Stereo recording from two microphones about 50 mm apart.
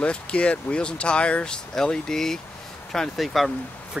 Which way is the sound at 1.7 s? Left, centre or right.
Centre.